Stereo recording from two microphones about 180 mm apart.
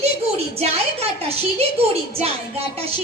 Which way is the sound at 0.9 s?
35° right (ahead or behind).